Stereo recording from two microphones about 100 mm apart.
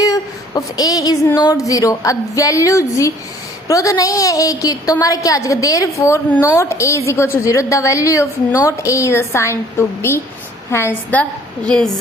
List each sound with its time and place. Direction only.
0.0 s a sound: 40° left (ahead or behind)
1.4 s a woman's voice: 35° left (ahead or behind)
11.1 s a woman's voice: 10° left (ahead or behind)